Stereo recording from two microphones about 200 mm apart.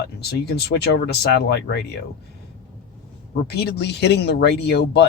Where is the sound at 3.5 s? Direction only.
55° left (ahead or behind).